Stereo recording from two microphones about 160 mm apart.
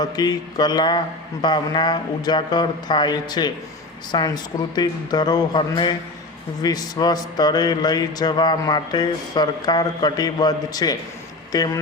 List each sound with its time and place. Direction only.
0.0 s speech: 25° left (ahead or behind)